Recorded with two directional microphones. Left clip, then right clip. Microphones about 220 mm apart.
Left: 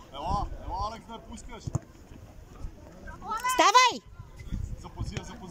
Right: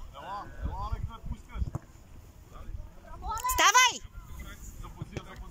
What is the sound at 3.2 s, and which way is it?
Children playing, 20° right (ahead or behind).